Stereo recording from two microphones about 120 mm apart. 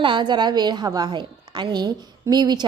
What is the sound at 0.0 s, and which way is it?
A woman's voice, 40° right (ahead or behind).